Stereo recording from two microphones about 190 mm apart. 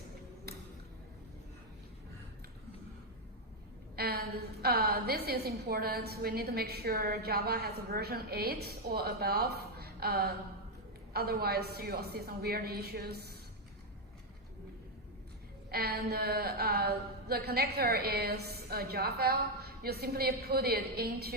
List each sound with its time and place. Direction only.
3.9 s a woman's voice: 55° right (ahead or behind)
15.7 s a woman's voice: 55° right (ahead or behind)